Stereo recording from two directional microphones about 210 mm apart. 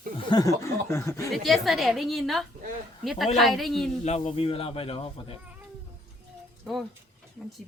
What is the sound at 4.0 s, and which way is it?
Speech, 30° left (ahead or behind).